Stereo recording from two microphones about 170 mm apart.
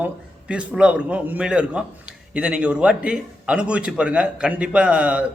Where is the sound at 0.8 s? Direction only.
5° right (ahead or behind).